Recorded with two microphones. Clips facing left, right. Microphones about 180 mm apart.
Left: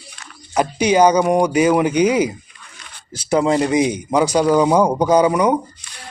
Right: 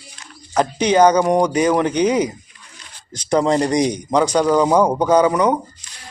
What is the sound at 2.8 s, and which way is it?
Zipper, 65° left (ahead or behind).